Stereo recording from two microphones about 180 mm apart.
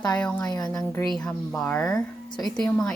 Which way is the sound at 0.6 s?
10° left (ahead or behind).